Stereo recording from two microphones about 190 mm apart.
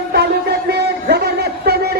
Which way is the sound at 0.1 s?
55° right (ahead or behind).